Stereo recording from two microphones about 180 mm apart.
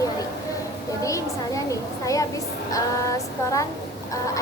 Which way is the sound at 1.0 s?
15° left (ahead or behind).